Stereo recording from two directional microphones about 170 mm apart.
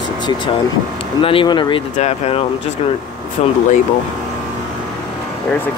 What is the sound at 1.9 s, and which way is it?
Speech, 40° left (ahead or behind).